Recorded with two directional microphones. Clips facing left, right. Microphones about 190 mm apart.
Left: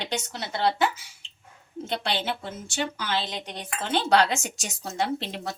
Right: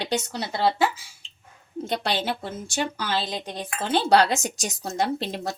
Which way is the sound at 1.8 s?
40° right (ahead or behind).